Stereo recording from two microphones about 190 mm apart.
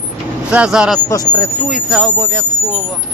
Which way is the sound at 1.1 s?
20° left (ahead or behind).